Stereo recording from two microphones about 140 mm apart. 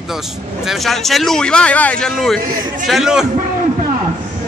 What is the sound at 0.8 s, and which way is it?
A man's voice, centre (ahead or behind).